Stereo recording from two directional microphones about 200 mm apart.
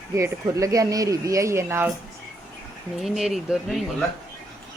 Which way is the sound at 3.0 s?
Centre (ahead or behind).